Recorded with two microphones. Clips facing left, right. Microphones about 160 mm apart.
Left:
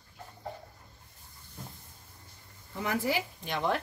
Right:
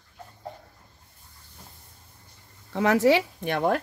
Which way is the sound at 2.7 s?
90° right.